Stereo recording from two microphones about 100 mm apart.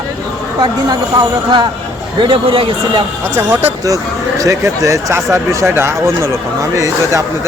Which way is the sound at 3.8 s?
35° right (ahead or behind).